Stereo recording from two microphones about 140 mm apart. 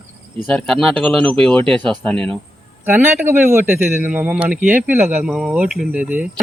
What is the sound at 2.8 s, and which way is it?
A man's voice, 15° right (ahead or behind).